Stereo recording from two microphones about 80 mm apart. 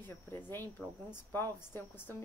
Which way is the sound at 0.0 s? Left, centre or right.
Left.